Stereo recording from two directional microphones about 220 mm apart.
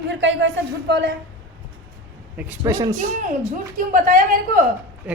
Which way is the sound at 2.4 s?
10° right (ahead or behind).